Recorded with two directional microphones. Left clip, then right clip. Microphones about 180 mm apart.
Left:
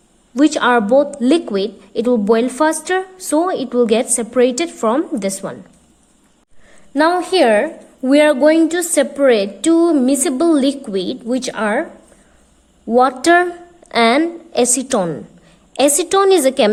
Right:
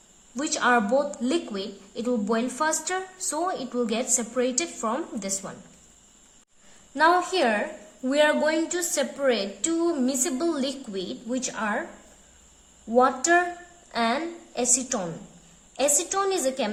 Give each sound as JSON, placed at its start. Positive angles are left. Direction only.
{"t": 0.3, "sound": "speech", "side_deg": 35}
{"t": 6.9, "sound": "a woman's voice", "side_deg": 45}
{"t": 13.0, "sound": "a woman's voice", "side_deg": 50}